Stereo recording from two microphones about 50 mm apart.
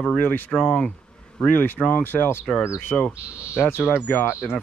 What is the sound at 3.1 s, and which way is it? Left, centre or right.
Speech, right.